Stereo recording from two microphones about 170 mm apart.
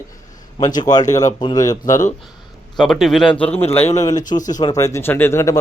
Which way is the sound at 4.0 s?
20° left (ahead or behind).